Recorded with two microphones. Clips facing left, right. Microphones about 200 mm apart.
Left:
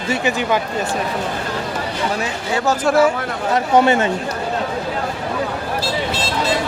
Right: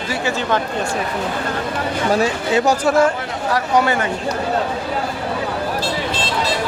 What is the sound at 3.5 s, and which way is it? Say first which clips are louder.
Speech: left 3 dB; 25° left (ahead or behind).